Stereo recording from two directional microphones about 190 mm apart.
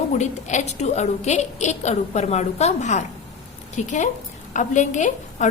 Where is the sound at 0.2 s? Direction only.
40° left (ahead or behind).